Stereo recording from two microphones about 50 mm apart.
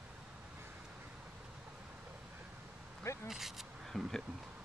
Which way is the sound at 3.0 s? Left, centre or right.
Left.